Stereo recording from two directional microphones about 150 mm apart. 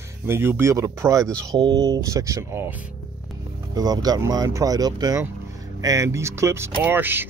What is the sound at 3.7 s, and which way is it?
Speech, 25° right (ahead or behind).